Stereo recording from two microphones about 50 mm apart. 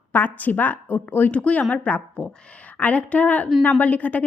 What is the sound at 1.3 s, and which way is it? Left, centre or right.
A woman's voice, left.